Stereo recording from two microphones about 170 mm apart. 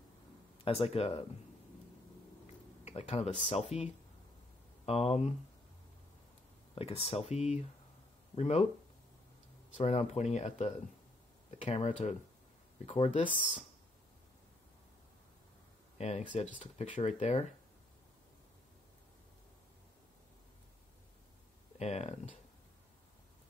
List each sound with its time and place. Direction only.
0.7 s speech: 35° left (ahead or behind)
2.8 s speech: 40° left (ahead or behind)
6.7 s speech: 35° left (ahead or behind)
9.8 s speech: 40° left (ahead or behind)
16.0 s speech: 40° left (ahead or behind)
21.7 s speech: 40° left (ahead or behind)